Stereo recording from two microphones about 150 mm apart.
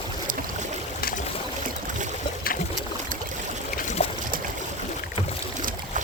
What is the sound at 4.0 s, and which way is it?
Trickle, 45° left (ahead or behind).